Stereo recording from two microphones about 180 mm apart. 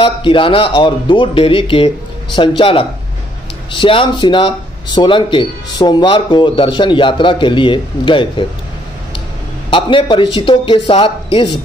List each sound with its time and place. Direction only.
0.0 s speech: 30° left (ahead or behind)
9.7 s speech: 30° left (ahead or behind)